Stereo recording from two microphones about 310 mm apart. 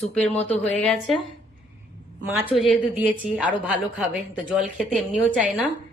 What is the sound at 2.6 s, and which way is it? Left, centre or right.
A woman's voice, centre.